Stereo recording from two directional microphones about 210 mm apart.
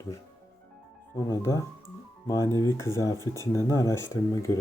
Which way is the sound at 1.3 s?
15° left (ahead or behind).